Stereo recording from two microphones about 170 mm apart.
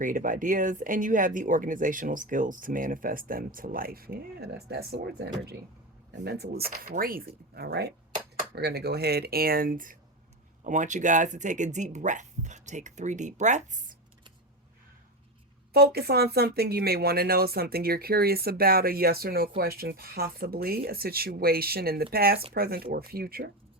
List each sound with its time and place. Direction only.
0.0 s speech: 50° right (ahead or behind)
15.7 s speech: 65° right (ahead or behind)